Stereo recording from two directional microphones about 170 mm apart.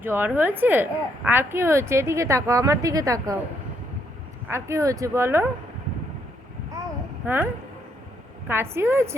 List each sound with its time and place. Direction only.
0.0 s speech: 10° right (ahead or behind)
4.4 s speech: 15° right (ahead or behind)
7.3 s speech: 10° right (ahead or behind)